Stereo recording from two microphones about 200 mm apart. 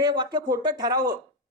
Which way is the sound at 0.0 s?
20° right (ahead or behind).